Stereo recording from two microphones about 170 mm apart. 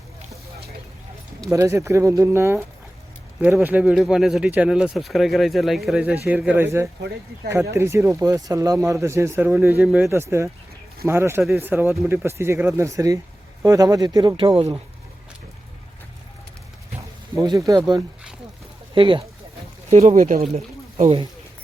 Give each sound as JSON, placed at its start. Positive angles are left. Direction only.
{"t": 1.5, "sound": "speech", "side_deg": -15}
{"t": 17.0, "sound": "a sound", "side_deg": -20}
{"t": 17.7, "sound": "speech", "side_deg": -20}
{"t": 19.9, "sound": "speech", "side_deg": -45}
{"t": 20.9, "sound": "speech", "side_deg": -35}